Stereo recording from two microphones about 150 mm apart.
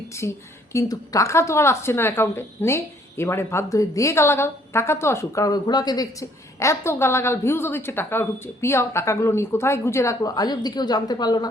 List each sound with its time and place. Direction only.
0.1 s a woman's voice: 20° left (ahead or behind)